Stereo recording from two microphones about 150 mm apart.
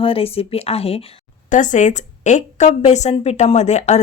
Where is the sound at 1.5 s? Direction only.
55° left (ahead or behind).